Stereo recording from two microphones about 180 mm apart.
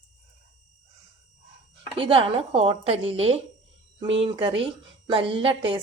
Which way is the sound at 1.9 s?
30° right (ahead or behind).